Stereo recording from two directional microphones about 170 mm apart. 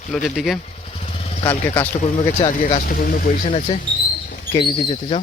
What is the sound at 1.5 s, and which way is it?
Speech, 10° left (ahead or behind).